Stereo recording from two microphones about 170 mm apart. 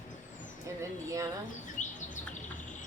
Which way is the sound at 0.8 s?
20° right (ahead or behind).